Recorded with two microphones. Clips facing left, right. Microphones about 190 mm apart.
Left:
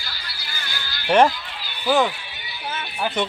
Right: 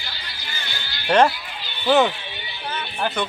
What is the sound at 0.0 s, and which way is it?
Music, 20° right (ahead or behind).